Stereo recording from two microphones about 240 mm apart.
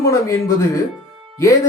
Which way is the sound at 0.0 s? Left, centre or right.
Centre.